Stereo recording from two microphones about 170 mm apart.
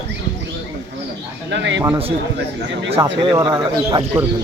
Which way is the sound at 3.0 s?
20° right (ahead or behind).